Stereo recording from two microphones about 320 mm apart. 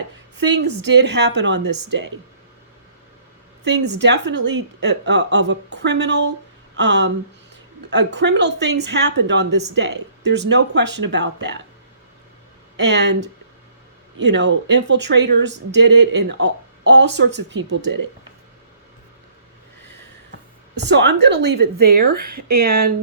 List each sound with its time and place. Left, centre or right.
0.3 s a woman's voice: right
3.7 s a woman's voice: right
12.7 s speech: right
14.2 s a woman's voice: right
20.8 s a woman's voice: right